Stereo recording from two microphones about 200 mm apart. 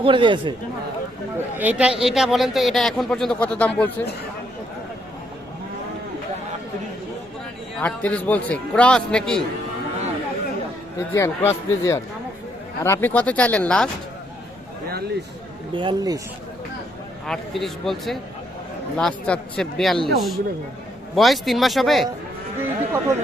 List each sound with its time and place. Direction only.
0.0 s speech: 25° right (ahead or behind)
1.5 s speech: 5° right (ahead or behind)
7.8 s a man's voice: 5° left (ahead or behind)
11.1 s a man's voice: 15° left (ahead or behind)
15.7 s speech: 25° right (ahead or behind)
17.2 s speech: centre (ahead or behind)
22.6 s speech: 10° right (ahead or behind)